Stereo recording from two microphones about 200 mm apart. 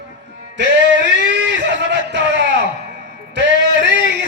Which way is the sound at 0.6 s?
60° right (ahead or behind).